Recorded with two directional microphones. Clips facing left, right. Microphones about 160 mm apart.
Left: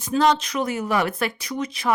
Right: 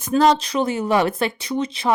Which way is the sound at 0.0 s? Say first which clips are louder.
Right 3 dB; 50° right (ahead or behind).